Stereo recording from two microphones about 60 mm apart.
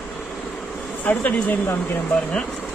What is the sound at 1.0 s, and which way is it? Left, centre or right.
Speech, left.